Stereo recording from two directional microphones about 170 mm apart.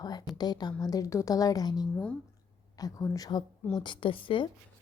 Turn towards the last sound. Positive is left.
turn(degrees=30)  # may be behind; listen again after turning